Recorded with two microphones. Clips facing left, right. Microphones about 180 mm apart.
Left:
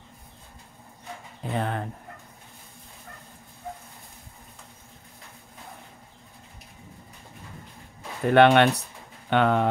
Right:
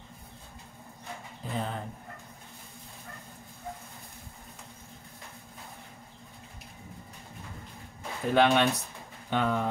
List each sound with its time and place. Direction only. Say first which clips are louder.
1.5 s speech: left 5 dB; 65° left (ahead or behind)
8.3 s speech: left 6 dB; 65° left (ahead or behind)